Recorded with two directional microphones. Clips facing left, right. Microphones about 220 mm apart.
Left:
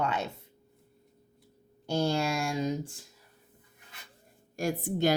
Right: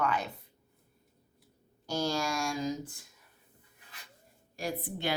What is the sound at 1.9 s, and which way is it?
Speech, 25° left (ahead or behind).